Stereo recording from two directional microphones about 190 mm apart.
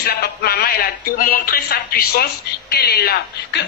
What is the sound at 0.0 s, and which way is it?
Speech, 55° left (ahead or behind).